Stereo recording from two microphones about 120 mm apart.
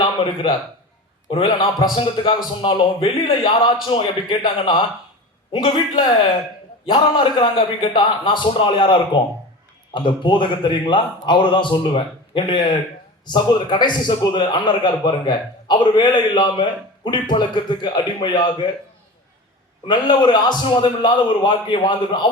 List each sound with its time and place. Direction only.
1.3 s a man's voice: 45° left (ahead or behind)
19.9 s a man's voice: 40° left (ahead or behind)